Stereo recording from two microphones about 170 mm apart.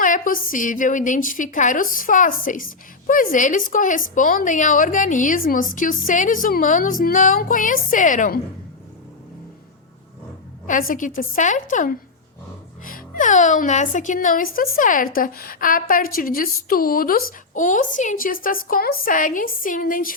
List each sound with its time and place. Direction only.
0.0 s a woman's voice: 50° left (ahead or behind)
10.7 s a woman's voice: 50° left (ahead or behind)